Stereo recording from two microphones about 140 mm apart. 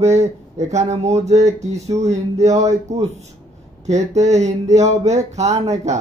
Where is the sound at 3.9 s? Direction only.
55° right (ahead or behind).